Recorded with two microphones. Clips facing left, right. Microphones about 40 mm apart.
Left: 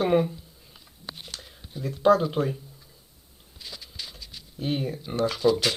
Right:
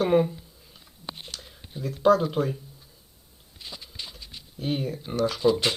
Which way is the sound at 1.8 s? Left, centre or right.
Centre.